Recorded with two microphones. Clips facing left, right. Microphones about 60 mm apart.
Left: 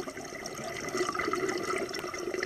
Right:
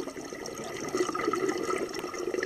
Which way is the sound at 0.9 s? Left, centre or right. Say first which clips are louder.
Right 2 dB; left.